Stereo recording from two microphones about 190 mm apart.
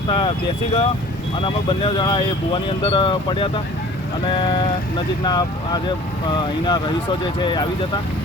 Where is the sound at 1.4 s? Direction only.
25° left (ahead or behind).